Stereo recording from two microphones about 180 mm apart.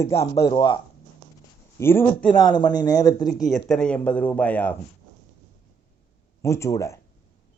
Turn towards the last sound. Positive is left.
turn(degrees=15)  # may be behind; listen again after turning